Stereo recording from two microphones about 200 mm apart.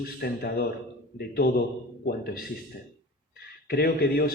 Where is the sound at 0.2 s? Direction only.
55° left (ahead or behind).